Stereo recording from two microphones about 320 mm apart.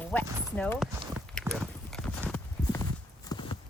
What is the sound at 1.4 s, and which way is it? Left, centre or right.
Clip-clop, centre.